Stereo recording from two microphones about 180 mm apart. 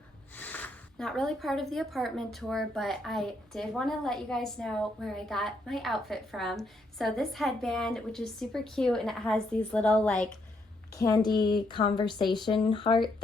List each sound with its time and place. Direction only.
0.3 s speech: 10° left (ahead or behind)
10.9 s speech: 20° left (ahead or behind)